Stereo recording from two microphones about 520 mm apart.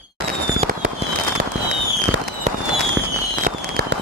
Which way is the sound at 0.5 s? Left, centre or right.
Centre.